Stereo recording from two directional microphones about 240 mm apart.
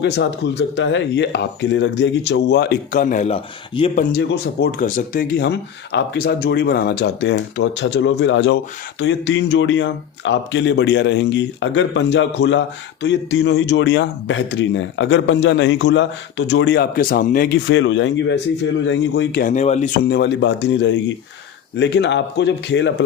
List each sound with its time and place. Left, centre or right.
0.0 s speech: left
4.1 s speech: left
4.8 s speech: left
20.1 s speech: left